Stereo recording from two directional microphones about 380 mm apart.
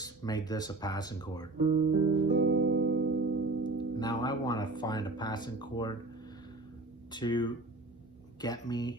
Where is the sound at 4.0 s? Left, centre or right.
Centre.